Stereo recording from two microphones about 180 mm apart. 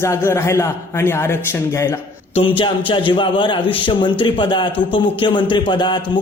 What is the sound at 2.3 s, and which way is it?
A man's voice, 30° left (ahead or behind).